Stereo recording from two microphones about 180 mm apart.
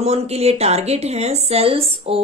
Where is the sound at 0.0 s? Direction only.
35° right (ahead or behind).